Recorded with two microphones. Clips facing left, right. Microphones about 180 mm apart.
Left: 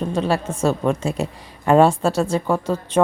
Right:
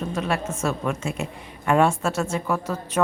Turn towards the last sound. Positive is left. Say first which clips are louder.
# left 6 dB
turn(degrees=30)  # may be behind; listen again after turning